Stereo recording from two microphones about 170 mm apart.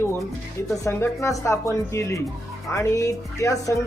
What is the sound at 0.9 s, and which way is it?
Speech, 15° left (ahead or behind).